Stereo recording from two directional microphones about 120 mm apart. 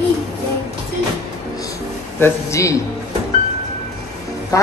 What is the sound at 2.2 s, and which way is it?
Speech, 25° left (ahead or behind).